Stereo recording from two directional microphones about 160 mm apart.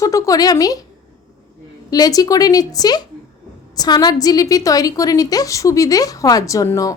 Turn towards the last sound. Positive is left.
turn(degrees=20)  # may be behind; listen again after turning